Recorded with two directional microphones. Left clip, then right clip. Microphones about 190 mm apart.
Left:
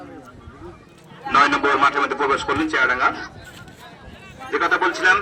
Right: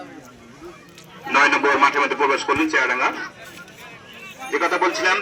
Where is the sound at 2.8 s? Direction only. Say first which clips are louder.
Left 2 dB; 15° left (ahead or behind).